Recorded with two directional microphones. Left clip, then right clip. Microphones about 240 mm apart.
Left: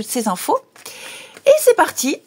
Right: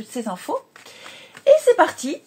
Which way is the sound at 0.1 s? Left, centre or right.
Left.